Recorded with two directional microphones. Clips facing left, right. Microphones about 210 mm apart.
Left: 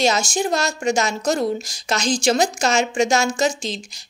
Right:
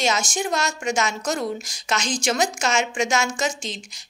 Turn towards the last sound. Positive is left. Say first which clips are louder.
# left 5 dB
turn(degrees=35)  # may be behind; listen again after turning